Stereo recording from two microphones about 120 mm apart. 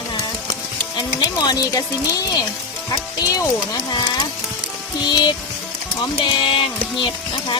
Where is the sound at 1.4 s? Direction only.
30° left (ahead or behind).